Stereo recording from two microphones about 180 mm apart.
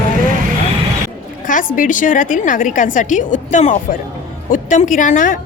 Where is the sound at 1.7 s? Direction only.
45° left (ahead or behind).